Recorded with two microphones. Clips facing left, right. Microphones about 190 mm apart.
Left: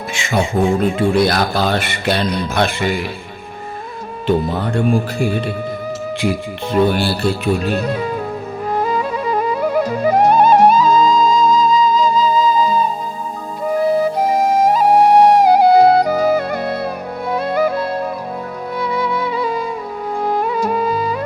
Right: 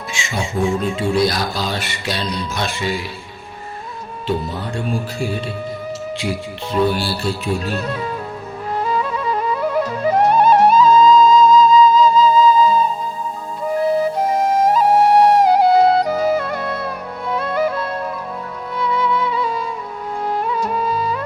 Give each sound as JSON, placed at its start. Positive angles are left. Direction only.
{"t": 0.1, "sound": "speech", "side_deg": 60}
{"t": 4.3, "sound": "speech", "side_deg": 60}
{"t": 6.7, "sound": "speech", "side_deg": 55}
{"t": 7.7, "sound": "speech", "side_deg": 15}
{"t": 8.9, "sound": "music", "side_deg": 10}
{"t": 11.6, "sound": "flute", "side_deg": 40}
{"t": 14.2, "sound": "music", "side_deg": 10}
{"t": 20.7, "sound": "music", "side_deg": 10}